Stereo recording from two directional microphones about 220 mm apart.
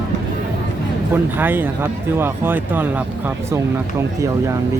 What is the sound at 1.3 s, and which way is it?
Speech, 10° right (ahead or behind).